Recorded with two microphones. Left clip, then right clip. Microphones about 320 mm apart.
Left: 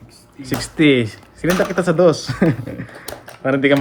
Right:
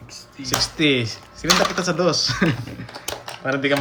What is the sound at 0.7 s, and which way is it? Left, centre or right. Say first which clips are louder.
Speech: left 9 dB; left.